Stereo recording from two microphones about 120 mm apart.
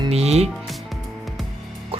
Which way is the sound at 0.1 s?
60° right (ahead or behind).